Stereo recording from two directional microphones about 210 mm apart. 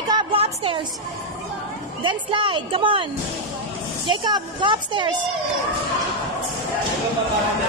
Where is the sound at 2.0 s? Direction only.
25° right (ahead or behind).